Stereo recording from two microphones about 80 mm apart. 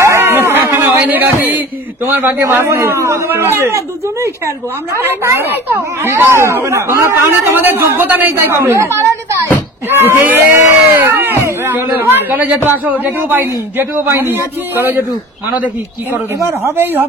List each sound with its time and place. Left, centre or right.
0.0 s a sound: right
2.0 s a man's voice: right
2.4 s speech: right
3.3 s a man's voice: right
16.4 s a man's voice: right